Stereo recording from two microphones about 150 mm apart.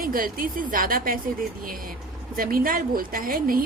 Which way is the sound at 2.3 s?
75° right (ahead or behind).